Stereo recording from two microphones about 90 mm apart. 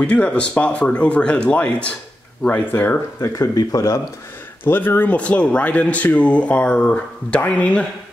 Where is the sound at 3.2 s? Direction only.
40° left (ahead or behind).